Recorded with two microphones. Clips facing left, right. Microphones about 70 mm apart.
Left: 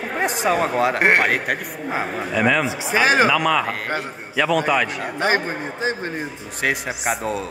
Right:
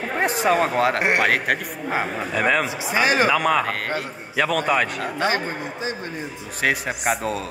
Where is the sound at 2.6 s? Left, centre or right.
Left.